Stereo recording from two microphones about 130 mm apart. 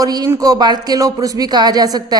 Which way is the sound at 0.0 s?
30° right (ahead or behind).